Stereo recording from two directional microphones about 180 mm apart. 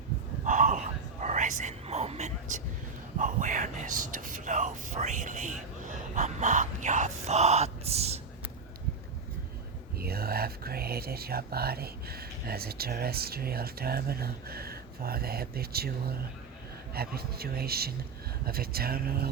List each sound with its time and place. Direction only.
0.4 s a sound: 45° right (ahead or behind)
1.2 s whispering: 45° right (ahead or behind)
10.0 s a man's voice: 55° right (ahead or behind)